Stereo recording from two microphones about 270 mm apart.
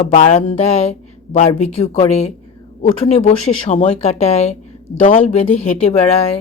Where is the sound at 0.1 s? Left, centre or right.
Left.